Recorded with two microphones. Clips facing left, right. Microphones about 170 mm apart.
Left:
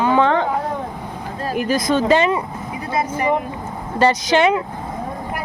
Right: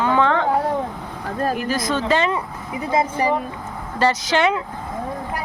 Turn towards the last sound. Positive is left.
turn(degrees=20)  # may be behind; listen again after turning